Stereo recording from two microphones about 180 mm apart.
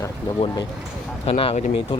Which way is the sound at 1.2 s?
30° left (ahead or behind).